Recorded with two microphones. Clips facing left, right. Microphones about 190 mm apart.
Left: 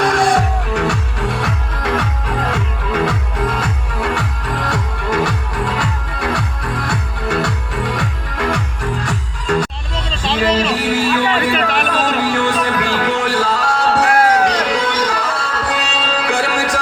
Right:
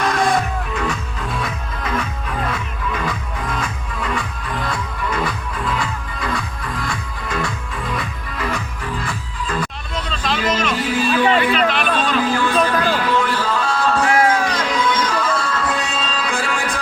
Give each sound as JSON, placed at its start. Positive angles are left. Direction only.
{"t": 0.0, "sound": "music", "side_deg": 80}
{"t": 10.1, "sound": "vehicle", "side_deg": 30}
{"t": 10.8, "sound": "music", "side_deg": 80}
{"t": 11.5, "sound": "a sound", "side_deg": 45}
{"t": 12.2, "sound": "music", "side_deg": 75}